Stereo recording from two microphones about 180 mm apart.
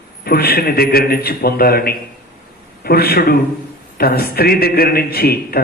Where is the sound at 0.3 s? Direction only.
60° left (ahead or behind).